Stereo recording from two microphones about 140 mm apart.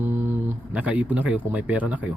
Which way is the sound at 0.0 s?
15° right (ahead or behind).